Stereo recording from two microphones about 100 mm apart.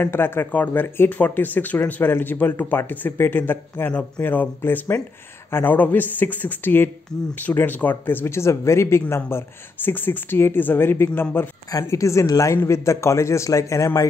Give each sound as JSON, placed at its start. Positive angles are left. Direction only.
{"t": 0.0, "sound": "speech", "side_deg": 20}
{"t": 11.7, "sound": "speech", "side_deg": 30}